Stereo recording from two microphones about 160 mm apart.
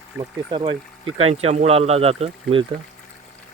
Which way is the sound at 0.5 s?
30° right (ahead or behind).